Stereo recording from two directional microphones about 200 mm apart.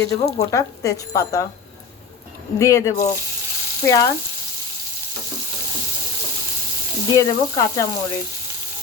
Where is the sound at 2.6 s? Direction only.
15° left (ahead or behind).